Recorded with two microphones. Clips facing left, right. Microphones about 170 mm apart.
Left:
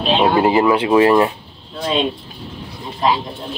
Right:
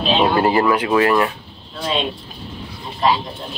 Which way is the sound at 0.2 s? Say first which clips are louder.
Left 2 dB; 15° left (ahead or behind).